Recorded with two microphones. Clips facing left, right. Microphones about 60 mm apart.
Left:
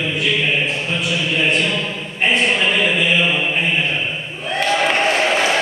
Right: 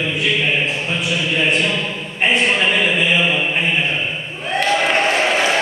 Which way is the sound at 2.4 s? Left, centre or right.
Centre.